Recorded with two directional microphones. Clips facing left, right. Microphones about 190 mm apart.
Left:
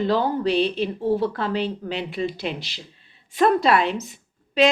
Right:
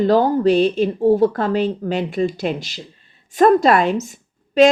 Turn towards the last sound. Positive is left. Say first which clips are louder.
# right 6 dB
turn(degrees=-45)  # may be behind; listen again after turning